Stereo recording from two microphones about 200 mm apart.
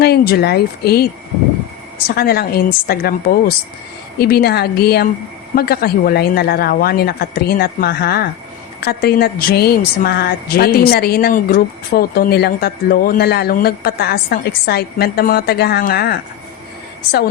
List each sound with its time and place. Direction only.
0.0 s a woman's voice: 50° left (ahead or behind)
2.0 s a woman's voice: 50° left (ahead or behind)